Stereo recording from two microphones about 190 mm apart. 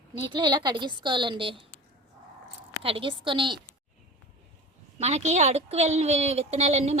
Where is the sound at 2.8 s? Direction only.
30° right (ahead or behind).